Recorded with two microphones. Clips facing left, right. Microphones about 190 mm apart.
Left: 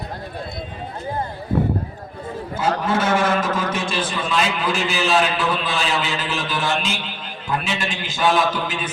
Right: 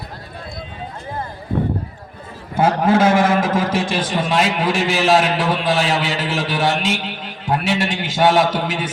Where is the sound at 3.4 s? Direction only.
70° right (ahead or behind).